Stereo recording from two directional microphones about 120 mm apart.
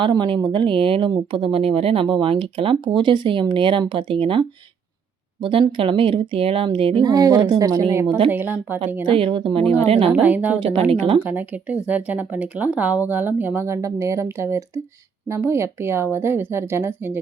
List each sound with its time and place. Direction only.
0.0 s speech: 40° right (ahead or behind)
7.0 s speech: 30° right (ahead or behind)
9.0 s speech: 50° right (ahead or behind)
10.2 s speech: 15° right (ahead or behind)
10.6 s speech: 60° right (ahead or behind)
11.2 s speech: 15° right (ahead or behind)